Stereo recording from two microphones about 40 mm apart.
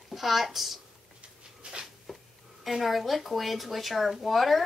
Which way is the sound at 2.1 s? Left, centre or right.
Centre.